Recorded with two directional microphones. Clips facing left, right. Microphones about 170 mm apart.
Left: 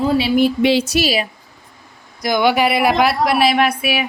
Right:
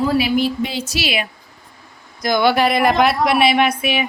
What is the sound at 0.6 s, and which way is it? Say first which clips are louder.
Speech: left 9 dB; 85° left.